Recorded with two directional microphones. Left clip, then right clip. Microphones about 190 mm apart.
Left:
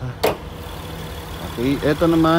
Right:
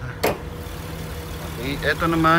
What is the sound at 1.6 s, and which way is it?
Speech, 35° left (ahead or behind).